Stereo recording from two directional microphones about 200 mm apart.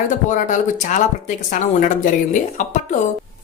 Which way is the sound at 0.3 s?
40° left (ahead or behind).